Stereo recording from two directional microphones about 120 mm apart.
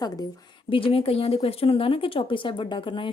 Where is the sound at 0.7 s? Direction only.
50° left (ahead or behind).